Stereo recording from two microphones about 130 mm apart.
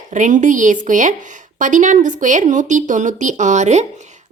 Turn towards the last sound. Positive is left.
turn(degrees=-65)  # may be behind; listen again after turning